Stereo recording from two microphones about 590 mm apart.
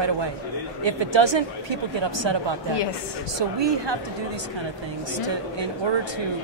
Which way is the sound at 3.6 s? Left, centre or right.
Right.